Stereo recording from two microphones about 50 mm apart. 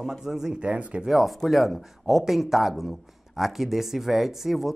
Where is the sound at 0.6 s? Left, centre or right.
Right.